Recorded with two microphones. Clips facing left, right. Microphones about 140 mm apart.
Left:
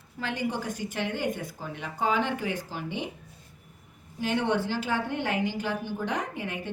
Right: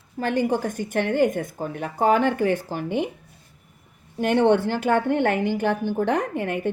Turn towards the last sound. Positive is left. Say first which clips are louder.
# right 9 dB
turn(degrees=-55)  # may be behind; listen again after turning